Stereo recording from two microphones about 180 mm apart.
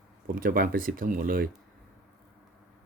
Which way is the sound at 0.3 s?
55° right (ahead or behind).